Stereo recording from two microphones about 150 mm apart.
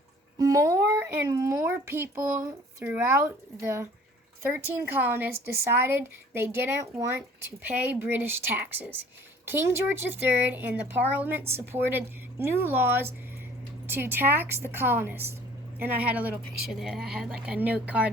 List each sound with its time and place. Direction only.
0.3 s speech: 20° right (ahead or behind)